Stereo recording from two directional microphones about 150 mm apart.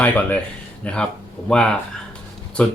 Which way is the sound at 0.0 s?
10° left (ahead or behind).